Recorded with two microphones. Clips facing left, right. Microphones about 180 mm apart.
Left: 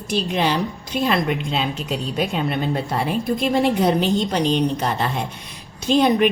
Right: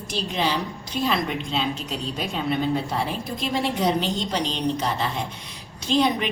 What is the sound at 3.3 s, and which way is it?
A woman's voice, 55° left (ahead or behind).